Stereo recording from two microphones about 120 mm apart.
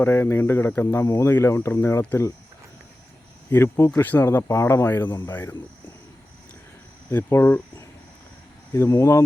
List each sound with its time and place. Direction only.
0.0 s speech: 20° left (ahead or behind)
3.5 s speech: 20° left (ahead or behind)
7.1 s speech: 20° left (ahead or behind)